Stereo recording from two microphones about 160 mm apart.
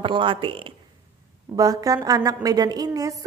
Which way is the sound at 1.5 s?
20° right (ahead or behind).